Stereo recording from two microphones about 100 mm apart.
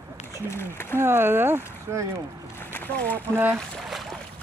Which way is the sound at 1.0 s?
25° right (ahead or behind).